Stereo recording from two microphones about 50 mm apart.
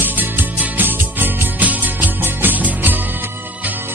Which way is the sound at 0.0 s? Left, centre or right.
Right.